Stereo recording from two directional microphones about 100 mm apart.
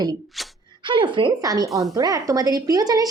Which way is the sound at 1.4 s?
40° right (ahead or behind).